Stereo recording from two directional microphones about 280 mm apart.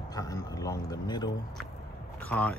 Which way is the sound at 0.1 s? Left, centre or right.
Centre.